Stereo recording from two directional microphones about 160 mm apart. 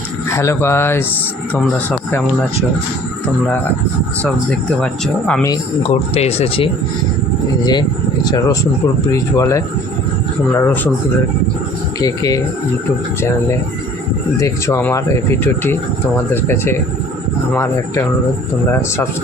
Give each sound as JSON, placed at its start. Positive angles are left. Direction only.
{"t": 0.3, "sound": "speech", "side_deg": 15}
{"t": 4.8, "sound": "speech", "side_deg": 5}
{"t": 5.5, "sound": "speech", "side_deg": 35}
{"t": 11.9, "sound": "speech", "side_deg": 25}
{"t": 14.3, "sound": "speech", "side_deg": 20}